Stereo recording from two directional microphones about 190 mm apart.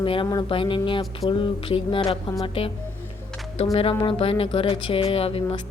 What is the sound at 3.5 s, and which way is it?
Music, 30° left (ahead or behind).